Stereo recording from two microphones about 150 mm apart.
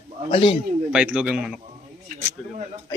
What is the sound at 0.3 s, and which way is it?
Speech, 35° left (ahead or behind).